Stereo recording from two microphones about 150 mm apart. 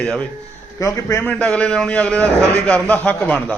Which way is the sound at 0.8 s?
20° left (ahead or behind).